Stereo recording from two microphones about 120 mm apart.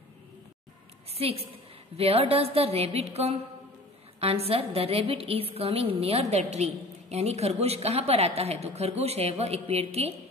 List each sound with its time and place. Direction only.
1.1 s a woman's voice: 55° right (ahead or behind)